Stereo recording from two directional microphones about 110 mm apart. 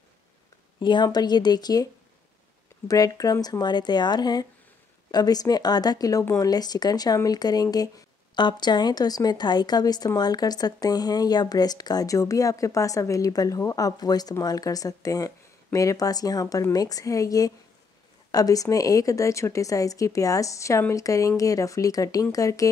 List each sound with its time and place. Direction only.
0.7 s a woman's voice: 40° left (ahead or behind)
2.9 s a woman's voice: 35° left (ahead or behind)